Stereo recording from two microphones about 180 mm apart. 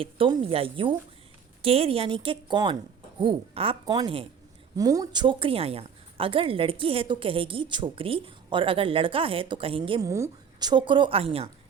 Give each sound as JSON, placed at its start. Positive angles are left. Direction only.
{"t": 0.0, "sound": "a woman's voice", "side_deg": -30}
{"t": 10.0, "sound": "a woman's voice", "side_deg": -15}